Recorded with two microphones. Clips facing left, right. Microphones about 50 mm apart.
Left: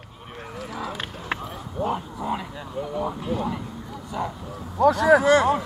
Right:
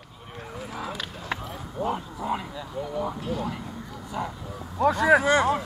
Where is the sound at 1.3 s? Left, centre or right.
Left.